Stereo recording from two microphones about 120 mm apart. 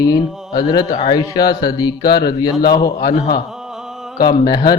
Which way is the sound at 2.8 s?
50° left (ahead or behind).